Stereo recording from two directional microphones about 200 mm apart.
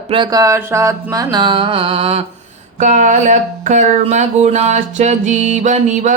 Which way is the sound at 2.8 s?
40° right (ahead or behind).